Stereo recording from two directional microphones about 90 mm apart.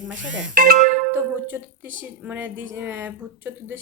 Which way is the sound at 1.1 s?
25° right (ahead or behind).